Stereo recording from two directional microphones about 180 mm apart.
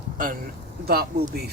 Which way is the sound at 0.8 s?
60° right (ahead or behind).